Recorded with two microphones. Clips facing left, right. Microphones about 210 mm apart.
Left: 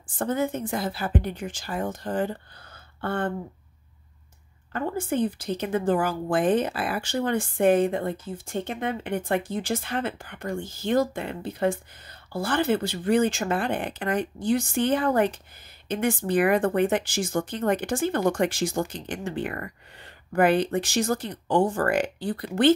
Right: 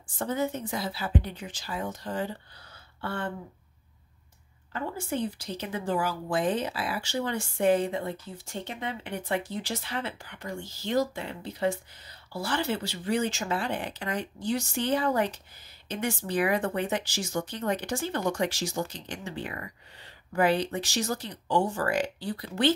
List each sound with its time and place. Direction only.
0.2 s a woman's voice: 50° left (ahead or behind)
4.7 s a woman's voice: 50° left (ahead or behind)